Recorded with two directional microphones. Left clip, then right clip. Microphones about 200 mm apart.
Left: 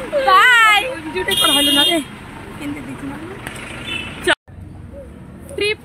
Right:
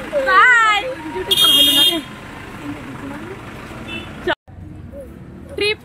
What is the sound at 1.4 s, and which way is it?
Car alarm, 25° left (ahead or behind).